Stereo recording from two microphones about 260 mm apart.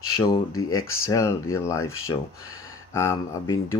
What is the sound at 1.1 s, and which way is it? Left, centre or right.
Speech, centre.